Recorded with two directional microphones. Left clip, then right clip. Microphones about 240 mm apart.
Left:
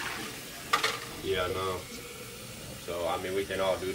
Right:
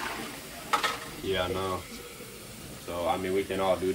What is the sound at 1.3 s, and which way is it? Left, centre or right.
Speech, right.